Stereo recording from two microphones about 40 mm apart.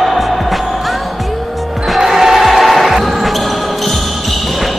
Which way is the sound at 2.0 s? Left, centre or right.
Centre.